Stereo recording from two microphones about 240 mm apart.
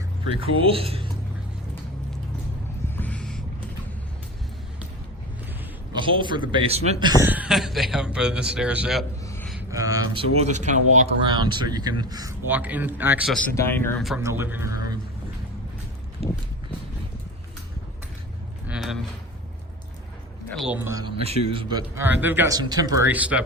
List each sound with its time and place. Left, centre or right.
0.6 s a man's voice: right
2.9 s boat: centre
5.9 s a man's voice: centre
7.1 s speech: centre
9.2 s a sound: centre
9.5 s a sound: centre
10.3 s speech: right; by 14.2 s centre
14.2 s speech: centre
16.2 s walk: right
18.7 s a sound: centre
20.5 s a man's voice: centre
21.2 s speech: right; by 23.4 s centre